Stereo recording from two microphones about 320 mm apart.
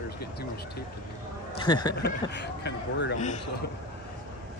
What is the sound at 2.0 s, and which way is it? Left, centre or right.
Speech, left.